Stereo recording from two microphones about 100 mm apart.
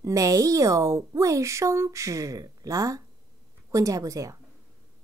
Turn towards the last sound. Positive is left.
turn(degrees=-35)  # may be behind; listen again after turning